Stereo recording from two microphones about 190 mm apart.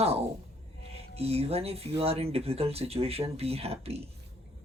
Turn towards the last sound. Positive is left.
turn(degrees=-30)  # may be behind; listen again after turning